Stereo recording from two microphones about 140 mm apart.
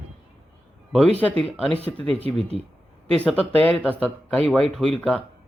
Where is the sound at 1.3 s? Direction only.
45° right (ahead or behind).